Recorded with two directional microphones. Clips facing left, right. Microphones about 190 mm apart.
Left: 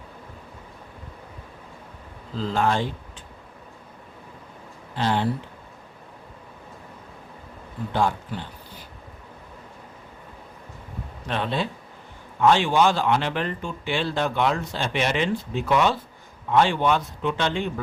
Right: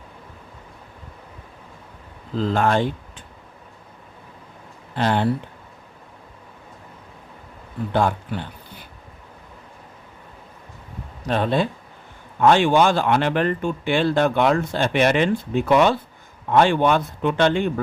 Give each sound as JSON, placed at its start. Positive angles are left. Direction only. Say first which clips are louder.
{"t": 2.3, "sound": "speech", "louder": "right 4 dB", "side_deg": -60}
{"t": 4.9, "sound": "speech", "louder": "right 3 dB", "side_deg": -55}
{"t": 7.9, "sound": "speech", "louder": "right 3 dB", "side_deg": -60}
{"t": 11.3, "sound": "speech", "louder": "right 6 dB", "side_deg": -45}